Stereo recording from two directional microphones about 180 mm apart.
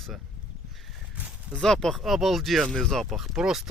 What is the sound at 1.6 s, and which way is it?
Speech, 5° left (ahead or behind).